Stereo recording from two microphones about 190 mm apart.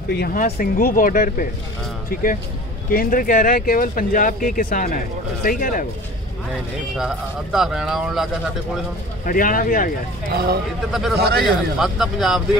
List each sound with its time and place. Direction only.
0.1 s speech: 50° left (ahead or behind)
2.9 s speech: 45° left (ahead or behind)
7.0 s a man's voice: 5° right (ahead or behind)
9.2 s speech: 45° left (ahead or behind)
10.9 s a man's voice: centre (ahead or behind)
11.1 s a man's voice: 55° right (ahead or behind)
11.4 s a man's voice: centre (ahead or behind)